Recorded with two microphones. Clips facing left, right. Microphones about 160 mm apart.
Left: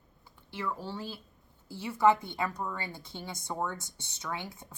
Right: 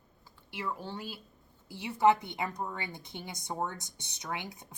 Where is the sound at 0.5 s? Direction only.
15° right (ahead or behind).